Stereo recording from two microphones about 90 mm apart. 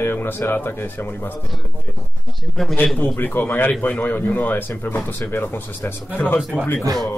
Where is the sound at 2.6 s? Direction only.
5° left (ahead or behind).